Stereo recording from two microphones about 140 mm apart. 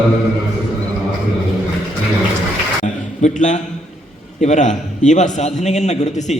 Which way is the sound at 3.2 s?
60° left (ahead or behind).